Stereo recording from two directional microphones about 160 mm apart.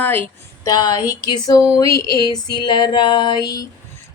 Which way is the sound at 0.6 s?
25° left (ahead or behind).